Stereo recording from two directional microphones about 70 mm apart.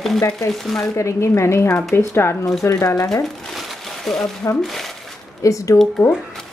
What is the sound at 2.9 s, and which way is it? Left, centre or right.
Speech, left.